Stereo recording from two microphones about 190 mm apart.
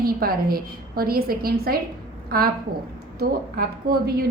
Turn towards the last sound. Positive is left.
turn(degrees=-50)  # may be behind; listen again after turning